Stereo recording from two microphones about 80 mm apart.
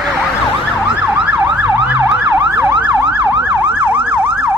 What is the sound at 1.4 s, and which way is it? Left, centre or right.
Emergency vehicle, right.